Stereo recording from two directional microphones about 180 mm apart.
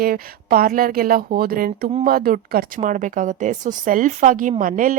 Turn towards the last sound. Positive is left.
turn(degrees=-45)  # may be behind; listen again after turning